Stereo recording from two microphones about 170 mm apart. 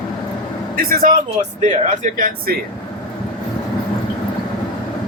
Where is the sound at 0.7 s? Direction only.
60° right (ahead or behind).